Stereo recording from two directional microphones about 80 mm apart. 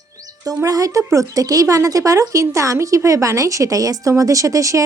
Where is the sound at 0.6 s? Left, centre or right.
Right.